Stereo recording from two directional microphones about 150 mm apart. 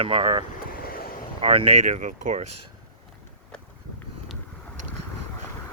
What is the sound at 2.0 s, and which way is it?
Speech, 55° right (ahead or behind).